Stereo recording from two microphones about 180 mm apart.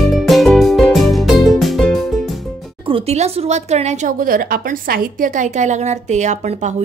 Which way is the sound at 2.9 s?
35° right (ahead or behind).